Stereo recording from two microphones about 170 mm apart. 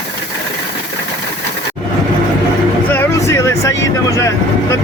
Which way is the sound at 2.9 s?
15° left (ahead or behind).